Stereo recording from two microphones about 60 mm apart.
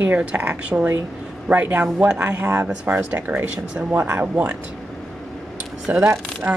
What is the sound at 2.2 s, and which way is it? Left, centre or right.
Speech, right.